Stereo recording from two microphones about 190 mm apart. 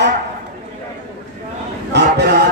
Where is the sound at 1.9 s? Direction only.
60° right (ahead or behind).